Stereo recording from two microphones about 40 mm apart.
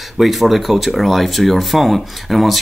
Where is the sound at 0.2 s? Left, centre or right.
Centre.